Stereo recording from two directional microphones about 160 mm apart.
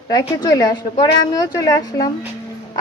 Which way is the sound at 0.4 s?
25° left (ahead or behind).